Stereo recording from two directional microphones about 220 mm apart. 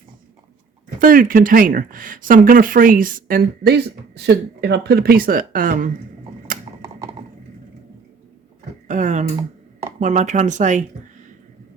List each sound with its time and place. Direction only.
0.9 s speech: 40° right (ahead or behind)
6.5 s mechanisms: 40° right (ahead or behind)
8.9 s speech: 35° right (ahead or behind)